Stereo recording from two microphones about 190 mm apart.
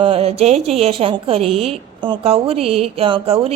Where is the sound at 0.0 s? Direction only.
30° right (ahead or behind).